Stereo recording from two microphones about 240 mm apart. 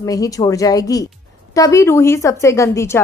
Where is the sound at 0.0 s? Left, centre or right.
Centre.